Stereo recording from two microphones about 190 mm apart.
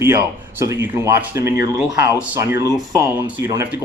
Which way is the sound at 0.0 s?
15° right (ahead or behind).